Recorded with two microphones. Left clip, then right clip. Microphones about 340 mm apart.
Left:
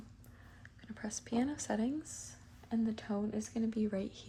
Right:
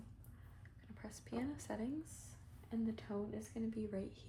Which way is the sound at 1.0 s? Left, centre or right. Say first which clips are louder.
Left 9 dB; left.